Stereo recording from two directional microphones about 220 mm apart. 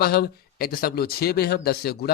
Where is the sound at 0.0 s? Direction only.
45° left (ahead or behind).